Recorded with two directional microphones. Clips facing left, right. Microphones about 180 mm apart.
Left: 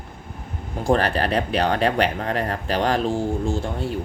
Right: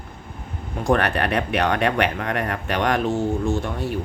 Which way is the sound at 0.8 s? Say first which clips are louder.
Even; 30° left (ahead or behind).